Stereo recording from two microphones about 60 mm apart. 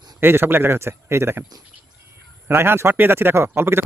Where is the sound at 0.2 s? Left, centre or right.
Right.